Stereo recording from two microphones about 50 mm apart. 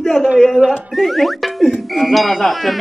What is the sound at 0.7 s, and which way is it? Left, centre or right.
Speech, centre.